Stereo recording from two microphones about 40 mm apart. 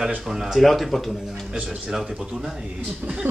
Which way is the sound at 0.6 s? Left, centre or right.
Centre.